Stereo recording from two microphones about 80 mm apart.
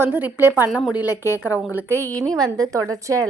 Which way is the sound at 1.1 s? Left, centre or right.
Left.